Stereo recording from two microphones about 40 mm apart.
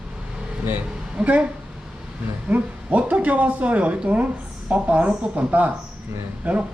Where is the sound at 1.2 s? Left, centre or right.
Right.